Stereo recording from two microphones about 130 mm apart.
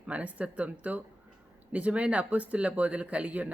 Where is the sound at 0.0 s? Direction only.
10° right (ahead or behind).